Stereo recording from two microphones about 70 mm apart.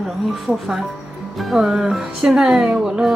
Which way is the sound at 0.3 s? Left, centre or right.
Centre.